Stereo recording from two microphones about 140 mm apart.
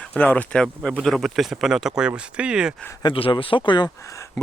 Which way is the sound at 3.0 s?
40° left (ahead or behind).